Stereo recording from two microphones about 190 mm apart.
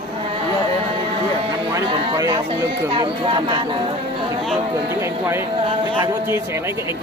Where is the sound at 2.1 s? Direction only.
15° right (ahead or behind).